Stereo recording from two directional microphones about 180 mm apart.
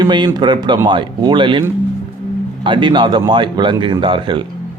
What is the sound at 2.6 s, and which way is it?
Speech, 25° right (ahead or behind).